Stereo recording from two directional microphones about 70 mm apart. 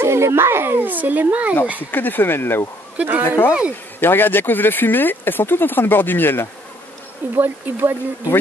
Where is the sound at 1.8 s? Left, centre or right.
Left.